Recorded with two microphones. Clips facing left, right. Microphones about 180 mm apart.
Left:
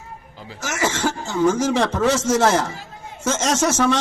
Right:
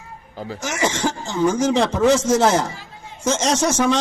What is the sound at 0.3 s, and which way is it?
Speech, 45° right (ahead or behind).